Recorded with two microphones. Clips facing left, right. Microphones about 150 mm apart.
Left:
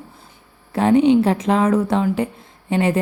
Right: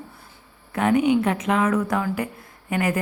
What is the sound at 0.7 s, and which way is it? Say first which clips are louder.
A woman's voice: left 5 dB; 30° left (ahead or behind).